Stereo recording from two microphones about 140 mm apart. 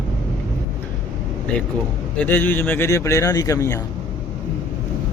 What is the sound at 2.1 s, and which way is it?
Speech, 15° left (ahead or behind).